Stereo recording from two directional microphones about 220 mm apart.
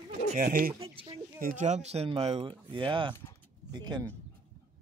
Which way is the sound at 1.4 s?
30° right (ahead or behind).